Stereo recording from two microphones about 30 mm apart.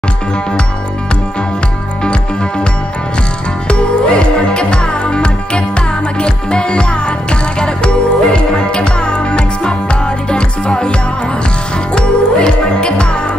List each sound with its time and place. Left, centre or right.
3.6 s music: left